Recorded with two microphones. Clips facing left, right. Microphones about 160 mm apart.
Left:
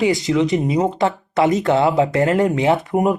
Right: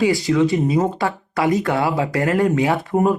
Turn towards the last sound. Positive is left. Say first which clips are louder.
# left 1 dB
turn(degrees=20)  # may be behind; listen again after turning